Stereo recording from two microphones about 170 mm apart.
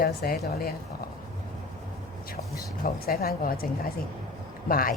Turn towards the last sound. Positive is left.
turn(degrees=55)  # may be behind; listen again after turning